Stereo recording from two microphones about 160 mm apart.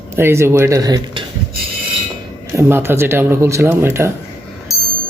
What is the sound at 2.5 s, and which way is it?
Speech, 15° right (ahead or behind).